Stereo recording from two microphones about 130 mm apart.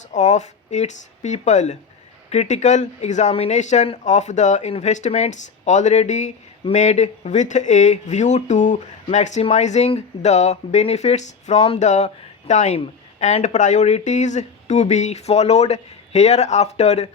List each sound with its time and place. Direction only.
0.1 s speech: 65° left (ahead or behind)